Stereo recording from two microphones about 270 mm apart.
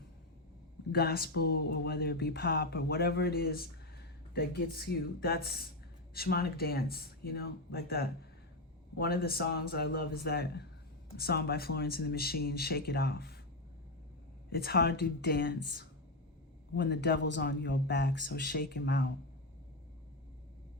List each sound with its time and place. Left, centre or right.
0.9 s speech: left
14.5 s speech: left